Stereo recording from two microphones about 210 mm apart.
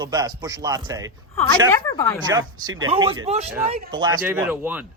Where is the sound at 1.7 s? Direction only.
15° left (ahead or behind).